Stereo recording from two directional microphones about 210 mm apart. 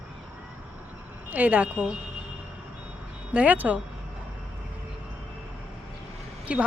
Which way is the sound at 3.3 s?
5° right (ahead or behind).